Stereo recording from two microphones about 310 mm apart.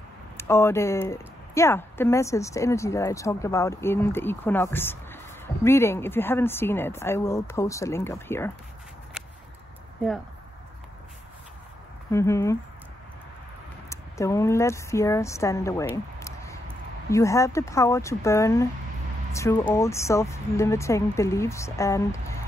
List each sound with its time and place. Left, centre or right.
0.4 s speech: centre
12.1 s speech: centre
13.8 s speech: centre
16.2 s a sound: centre
17.1 s speech: centre